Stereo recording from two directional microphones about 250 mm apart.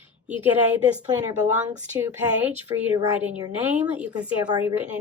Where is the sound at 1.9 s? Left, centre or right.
Centre.